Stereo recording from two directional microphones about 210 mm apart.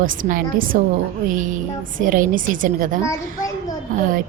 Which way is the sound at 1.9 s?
40° right (ahead or behind).